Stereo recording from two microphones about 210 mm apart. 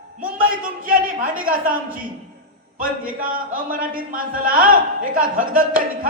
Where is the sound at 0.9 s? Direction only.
40° right (ahead or behind).